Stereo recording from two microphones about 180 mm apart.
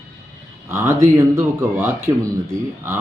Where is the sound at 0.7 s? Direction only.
15° right (ahead or behind).